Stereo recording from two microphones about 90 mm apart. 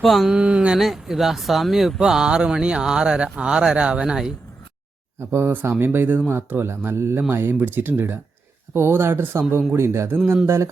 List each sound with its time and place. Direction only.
0.0 s speech: centre (ahead or behind)
5.3 s a man's voice: 25° right (ahead or behind)